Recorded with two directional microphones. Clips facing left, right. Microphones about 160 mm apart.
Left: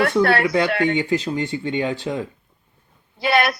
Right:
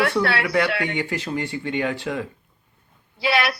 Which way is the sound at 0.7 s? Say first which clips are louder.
Left 6 dB; 45° left (ahead or behind).